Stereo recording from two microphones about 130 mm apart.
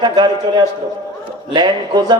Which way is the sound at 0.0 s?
30° right (ahead or behind).